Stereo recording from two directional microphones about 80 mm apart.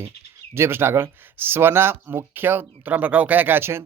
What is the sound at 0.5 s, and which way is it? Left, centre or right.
Speech, right.